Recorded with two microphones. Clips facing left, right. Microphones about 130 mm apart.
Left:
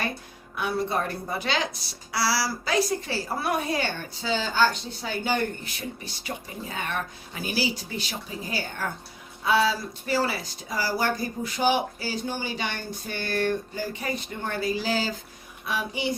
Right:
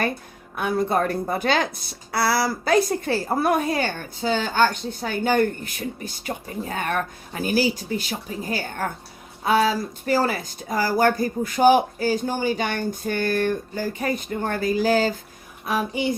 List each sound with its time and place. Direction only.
0.5 s speech: 50° right (ahead or behind)